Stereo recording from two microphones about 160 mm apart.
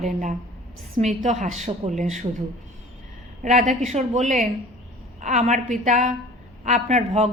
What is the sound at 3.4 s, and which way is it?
A man's voice, 50° right (ahead or behind).